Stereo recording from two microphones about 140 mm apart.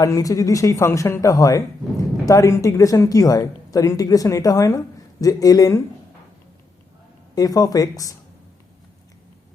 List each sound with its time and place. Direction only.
0.0 s speech: 25° left (ahead or behind)
7.3 s speech: 25° left (ahead or behind)